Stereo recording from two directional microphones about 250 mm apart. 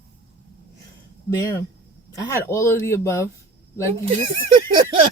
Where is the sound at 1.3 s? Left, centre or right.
Centre.